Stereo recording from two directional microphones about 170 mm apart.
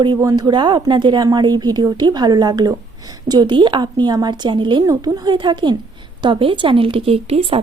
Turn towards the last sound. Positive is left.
turn(degrees=-35)  # may be behind; listen again after turning